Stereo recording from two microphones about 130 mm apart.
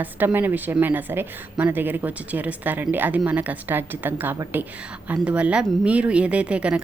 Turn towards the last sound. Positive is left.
turn(degrees=-10)  # may be behind; listen again after turning